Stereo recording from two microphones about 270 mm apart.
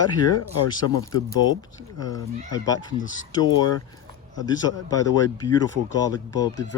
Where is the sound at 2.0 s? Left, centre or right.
Centre.